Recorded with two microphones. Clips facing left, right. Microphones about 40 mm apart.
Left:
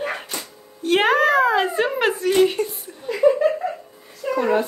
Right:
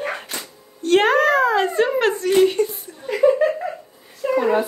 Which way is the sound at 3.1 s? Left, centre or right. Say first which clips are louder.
Right 1 dB; right.